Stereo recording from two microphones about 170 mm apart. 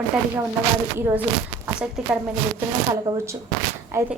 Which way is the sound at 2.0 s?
5° right (ahead or behind).